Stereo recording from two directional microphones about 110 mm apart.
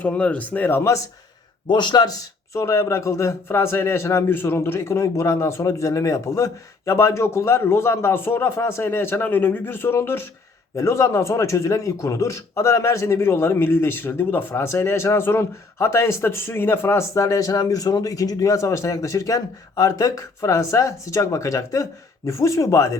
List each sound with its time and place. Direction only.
0.0 s speech: 10° left (ahead or behind)
1.6 s a man's voice: 45° left (ahead or behind)